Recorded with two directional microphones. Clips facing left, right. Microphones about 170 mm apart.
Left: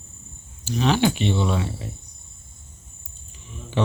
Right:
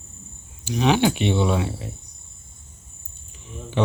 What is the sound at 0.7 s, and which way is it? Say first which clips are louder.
A man's voice: right 1 dB; 15° right (ahead or behind).